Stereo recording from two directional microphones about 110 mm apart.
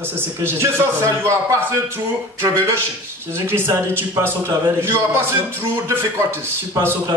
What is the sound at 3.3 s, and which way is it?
A man's voice, 20° right (ahead or behind).